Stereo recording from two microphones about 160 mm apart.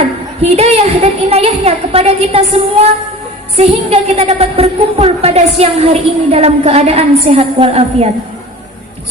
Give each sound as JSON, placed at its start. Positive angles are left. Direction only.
{"t": 0.5, "sound": "a woman's voice", "side_deg": -40}
{"t": 3.6, "sound": "a woman's voice", "side_deg": -40}